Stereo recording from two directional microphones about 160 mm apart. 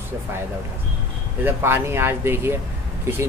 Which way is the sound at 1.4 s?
15° right (ahead or behind).